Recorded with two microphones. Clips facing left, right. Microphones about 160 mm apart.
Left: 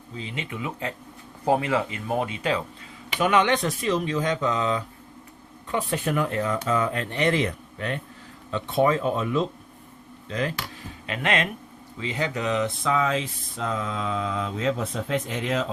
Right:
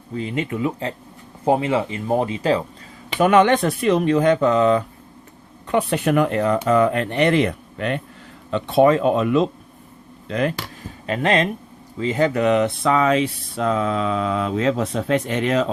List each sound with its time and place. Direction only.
0.1 s speech: 50° right (ahead or behind); by 0.9 s 35° right (ahead or behind)
1.5 s speech: 20° right (ahead or behind)
3.2 s speech: 45° right (ahead or behind)
5.6 s speech: 70° right (ahead or behind)
10.2 s speech: 60° right (ahead or behind)
11.0 s speech: 35° right (ahead or behind)
11.9 s speech: 45° right (ahead or behind); by 15.6 s 70° right (ahead or behind)